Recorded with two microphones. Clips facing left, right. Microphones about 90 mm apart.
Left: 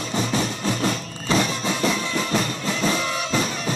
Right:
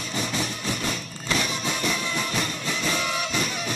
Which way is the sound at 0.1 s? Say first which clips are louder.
Left 5 dB; 30° left (ahead or behind).